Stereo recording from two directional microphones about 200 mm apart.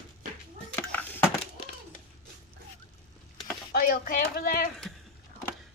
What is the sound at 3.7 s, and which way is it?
Speech, 45° left (ahead or behind).